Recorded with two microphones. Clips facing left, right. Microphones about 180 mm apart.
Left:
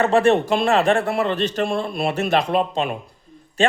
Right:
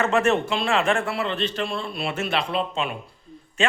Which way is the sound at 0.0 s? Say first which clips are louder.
Left 5 dB; 35° left (ahead or behind).